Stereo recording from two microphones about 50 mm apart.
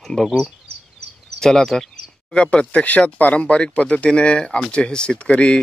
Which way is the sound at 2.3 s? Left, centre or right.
Left.